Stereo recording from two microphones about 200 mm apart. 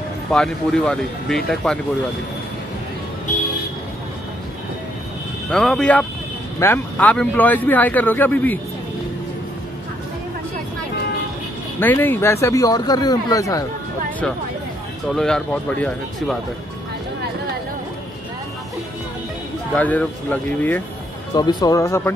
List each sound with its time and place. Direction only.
0.3 s speech: 5° left (ahead or behind)
5.5 s a man's voice: 5° left (ahead or behind)
11.8 s a man's voice: 10° left (ahead or behind)
15.1 s speech: 5° left (ahead or behind)
19.7 s a man's voice: 5° left (ahead or behind)
21.4 s a man's voice: 20° left (ahead or behind)